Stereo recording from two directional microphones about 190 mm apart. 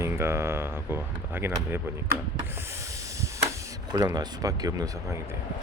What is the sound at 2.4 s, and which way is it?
Speech, 10° right (ahead or behind).